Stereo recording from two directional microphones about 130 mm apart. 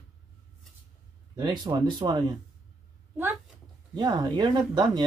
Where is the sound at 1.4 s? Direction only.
30° right (ahead or behind).